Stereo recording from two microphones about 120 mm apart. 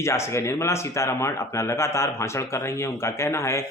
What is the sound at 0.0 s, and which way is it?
Speech, 25° left (ahead or behind).